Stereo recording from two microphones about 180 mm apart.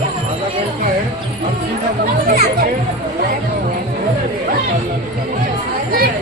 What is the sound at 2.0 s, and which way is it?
Speech, 60° right (ahead or behind).